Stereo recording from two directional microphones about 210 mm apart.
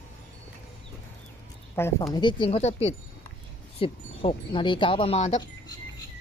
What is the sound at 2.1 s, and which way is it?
Speech, 25° left (ahead or behind).